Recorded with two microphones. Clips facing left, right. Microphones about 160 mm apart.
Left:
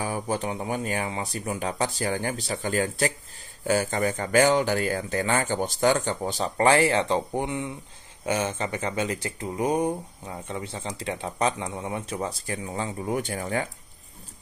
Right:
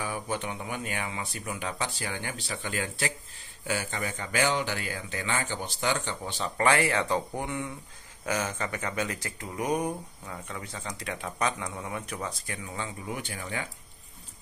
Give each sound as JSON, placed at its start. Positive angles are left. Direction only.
{"t": 0.0, "sound": "speech", "side_deg": 35}